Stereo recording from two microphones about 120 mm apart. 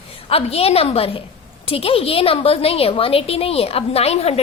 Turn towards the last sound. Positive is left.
turn(degrees=60)  # may be behind; listen again after turning